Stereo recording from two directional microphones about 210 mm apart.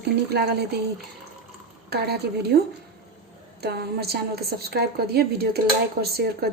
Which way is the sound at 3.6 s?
50° right (ahead or behind).